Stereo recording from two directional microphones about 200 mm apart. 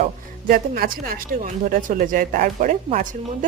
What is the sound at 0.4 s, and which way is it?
Speech, 45° right (ahead or behind).